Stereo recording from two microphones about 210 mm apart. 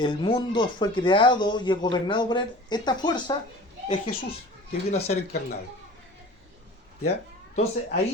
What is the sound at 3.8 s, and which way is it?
Speech, 30° left (ahead or behind).